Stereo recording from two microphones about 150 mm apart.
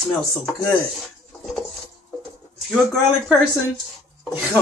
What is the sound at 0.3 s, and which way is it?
Speech, 5° left (ahead or behind).